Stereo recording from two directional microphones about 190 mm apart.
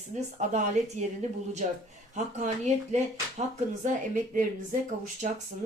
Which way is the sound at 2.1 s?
40° right (ahead or behind).